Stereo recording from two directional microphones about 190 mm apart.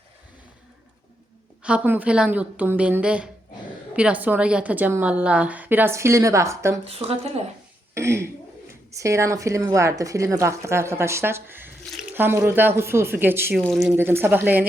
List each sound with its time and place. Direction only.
1.6 s a woman's voice: 10° right (ahead or behind)
6.8 s speech: 30° right (ahead or behind)
7.9 s a woman's voice: 15° right (ahead or behind)
13.6 s a woman's voice: centre (ahead or behind)